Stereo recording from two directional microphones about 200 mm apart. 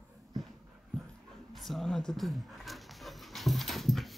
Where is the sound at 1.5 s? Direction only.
Centre (ahead or behind).